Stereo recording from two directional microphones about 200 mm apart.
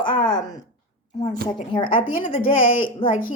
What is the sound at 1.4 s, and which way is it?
Speech, 5° left (ahead or behind).